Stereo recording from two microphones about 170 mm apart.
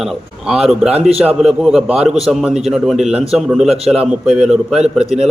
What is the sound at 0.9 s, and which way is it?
Speech, 35° right (ahead or behind).